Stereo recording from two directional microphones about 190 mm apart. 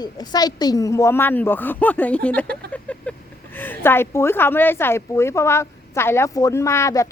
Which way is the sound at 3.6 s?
10° left (ahead or behind).